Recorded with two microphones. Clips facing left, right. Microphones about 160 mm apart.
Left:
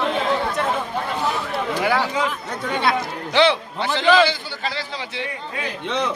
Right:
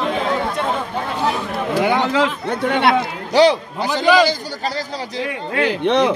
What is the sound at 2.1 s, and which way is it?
Speech, 80° right.